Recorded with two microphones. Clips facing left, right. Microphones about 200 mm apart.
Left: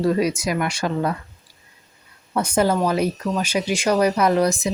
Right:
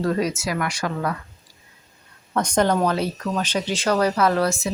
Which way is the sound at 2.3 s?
5° left (ahead or behind).